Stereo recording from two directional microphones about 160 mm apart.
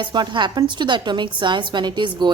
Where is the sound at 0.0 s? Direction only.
30° right (ahead or behind).